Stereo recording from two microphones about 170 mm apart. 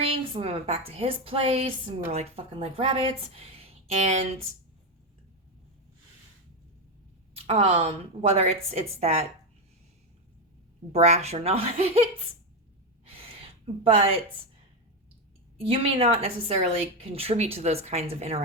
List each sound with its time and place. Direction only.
0.3 s a woman's voice: 35° right (ahead or behind)
7.3 s a woman's voice: 35° right (ahead or behind)
10.9 s a woman's voice: 40° right (ahead or behind)
13.8 s a woman's voice: 35° right (ahead or behind)
15.6 s a woman's voice: 35° right (ahead or behind)